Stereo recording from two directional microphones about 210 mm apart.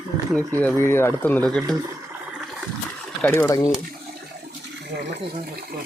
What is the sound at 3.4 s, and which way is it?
Speech, 15° left (ahead or behind).